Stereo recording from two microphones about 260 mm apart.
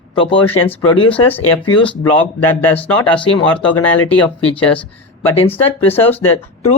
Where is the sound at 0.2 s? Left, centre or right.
Centre.